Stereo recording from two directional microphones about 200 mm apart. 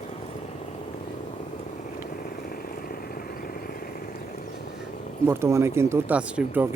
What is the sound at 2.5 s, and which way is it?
Vehicle, 45° left (ahead or behind).